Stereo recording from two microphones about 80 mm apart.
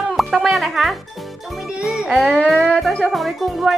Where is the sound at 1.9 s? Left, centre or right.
Centre.